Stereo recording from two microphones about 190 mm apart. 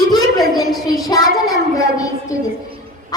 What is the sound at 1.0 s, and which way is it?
Speech, 20° left (ahead or behind).